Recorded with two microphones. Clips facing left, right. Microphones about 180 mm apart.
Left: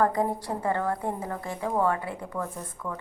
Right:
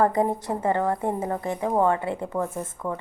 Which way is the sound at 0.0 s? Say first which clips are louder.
Right 3 dB; 20° right (ahead or behind).